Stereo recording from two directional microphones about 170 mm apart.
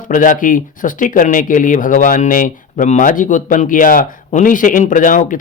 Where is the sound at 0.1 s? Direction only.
50° left (ahead or behind).